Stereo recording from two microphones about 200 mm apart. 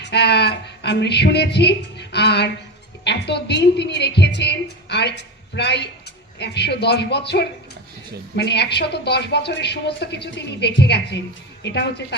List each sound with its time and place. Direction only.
0.0 s a woman's voice: 55° left (ahead or behind)